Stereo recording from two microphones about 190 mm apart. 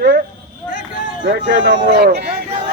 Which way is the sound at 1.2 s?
75° right (ahead or behind).